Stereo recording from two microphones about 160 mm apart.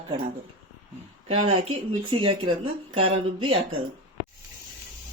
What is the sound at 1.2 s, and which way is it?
Speech, 35° right (ahead or behind).